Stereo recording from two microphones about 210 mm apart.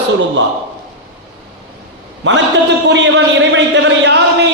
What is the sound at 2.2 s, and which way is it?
Speech, 55° right (ahead or behind).